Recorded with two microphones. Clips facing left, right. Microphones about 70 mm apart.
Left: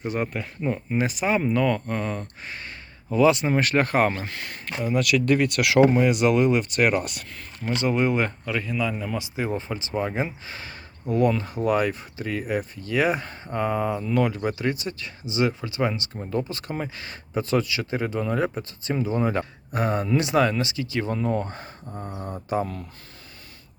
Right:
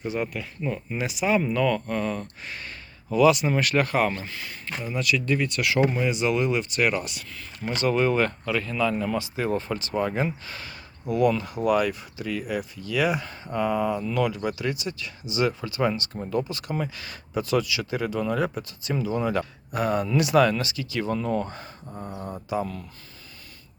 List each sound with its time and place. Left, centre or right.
0.1 s speech: left
1.5 s speech: left
4.3 s speech: left
5.8 s speech: left
7.8 s speech: centre
9.1 s speech: centre
16.1 s speech: centre
16.5 s speech: left
21.4 s speech: left
21.8 s speech: centre
22.4 s speech: left